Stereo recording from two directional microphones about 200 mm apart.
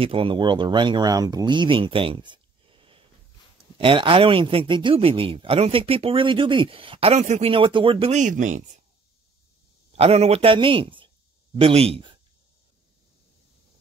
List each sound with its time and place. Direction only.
0.0 s a man's voice: 25° right (ahead or behind)
9.9 s a man's voice: 30° right (ahead or behind)